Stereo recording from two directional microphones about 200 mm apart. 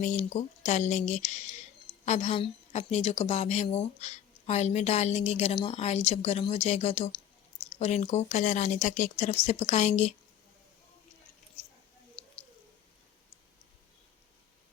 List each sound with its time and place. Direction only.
0.0 s a woman's voice: 35° left (ahead or behind)